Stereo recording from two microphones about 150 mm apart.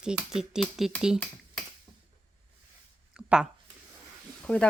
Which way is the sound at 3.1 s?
5° right (ahead or behind).